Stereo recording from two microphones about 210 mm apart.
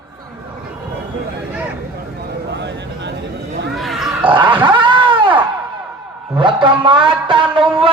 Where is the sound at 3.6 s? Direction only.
Centre (ahead or behind).